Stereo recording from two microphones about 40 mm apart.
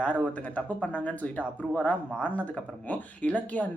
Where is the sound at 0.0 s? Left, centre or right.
Left.